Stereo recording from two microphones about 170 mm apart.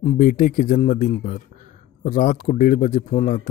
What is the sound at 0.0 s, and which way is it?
A man's voice, 45° left (ahead or behind).